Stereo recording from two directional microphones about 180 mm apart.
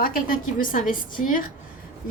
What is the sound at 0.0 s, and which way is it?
A woman's voice, 50° left (ahead or behind).